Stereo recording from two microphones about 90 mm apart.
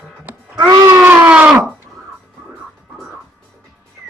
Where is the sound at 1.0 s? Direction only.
25° right (ahead or behind).